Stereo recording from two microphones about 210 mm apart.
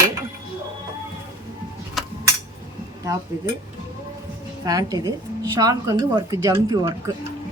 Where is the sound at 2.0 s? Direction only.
Centre (ahead or behind).